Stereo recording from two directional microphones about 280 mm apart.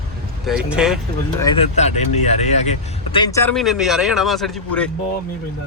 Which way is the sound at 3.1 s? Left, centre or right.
Centre.